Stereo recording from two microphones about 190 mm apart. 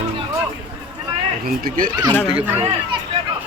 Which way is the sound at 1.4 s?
50° right (ahead or behind).